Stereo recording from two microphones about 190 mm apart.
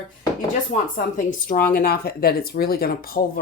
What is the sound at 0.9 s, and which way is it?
Speech, 45° left (ahead or behind).